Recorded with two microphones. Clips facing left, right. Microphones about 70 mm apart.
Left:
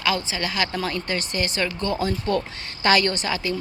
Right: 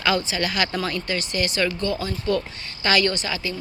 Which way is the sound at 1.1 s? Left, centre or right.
Left.